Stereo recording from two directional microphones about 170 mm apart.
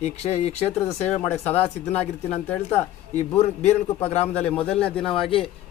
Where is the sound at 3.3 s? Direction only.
35° left (ahead or behind).